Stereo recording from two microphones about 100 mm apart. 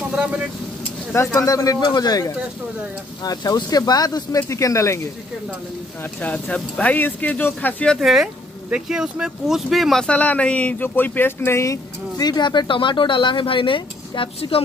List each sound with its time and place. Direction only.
0.1 s speech: 10° right (ahead or behind)
1.1 s speech: 30° left (ahead or behind)
6.2 s speech: 15° left (ahead or behind)
8.0 s speech: centre (ahead or behind)
10.0 s speech: 15° left (ahead or behind); by 14.6 s 65° left (ahead or behind)